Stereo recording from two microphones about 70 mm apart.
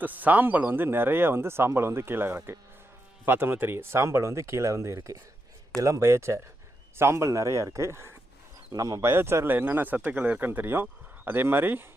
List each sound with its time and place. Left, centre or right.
0.0 s speech: right
8.7 s speech: right
9.0 s speech: right